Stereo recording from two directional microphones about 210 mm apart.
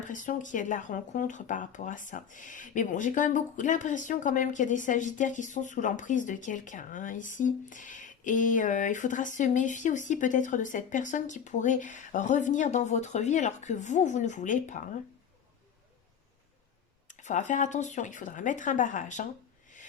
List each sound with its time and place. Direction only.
0.0 s speech: 35° left (ahead or behind)
17.1 s speech: 35° left (ahead or behind)